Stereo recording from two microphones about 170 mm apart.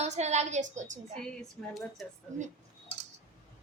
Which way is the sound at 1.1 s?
5° left (ahead or behind).